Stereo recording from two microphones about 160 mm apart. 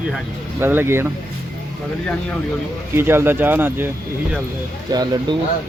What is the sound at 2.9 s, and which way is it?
Speech, 15° right (ahead or behind).